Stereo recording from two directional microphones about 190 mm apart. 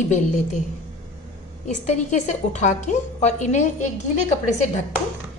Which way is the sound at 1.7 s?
40° left (ahead or behind).